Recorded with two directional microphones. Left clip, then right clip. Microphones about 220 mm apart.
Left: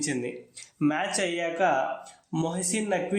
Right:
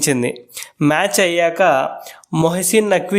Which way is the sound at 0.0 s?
50° right (ahead or behind).